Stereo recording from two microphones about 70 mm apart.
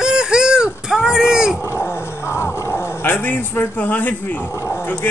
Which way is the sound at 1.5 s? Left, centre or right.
Left.